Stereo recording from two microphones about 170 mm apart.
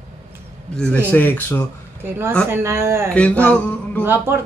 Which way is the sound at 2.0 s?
15° right (ahead or behind).